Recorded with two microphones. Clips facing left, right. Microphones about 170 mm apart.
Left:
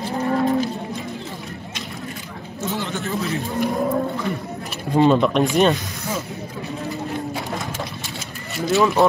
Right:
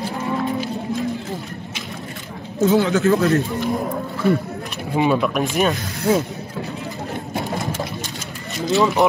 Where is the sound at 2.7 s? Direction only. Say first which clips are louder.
Right 10 dB; 85° right.